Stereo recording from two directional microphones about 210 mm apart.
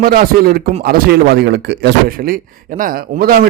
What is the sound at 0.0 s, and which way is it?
Speech, 45° right (ahead or behind).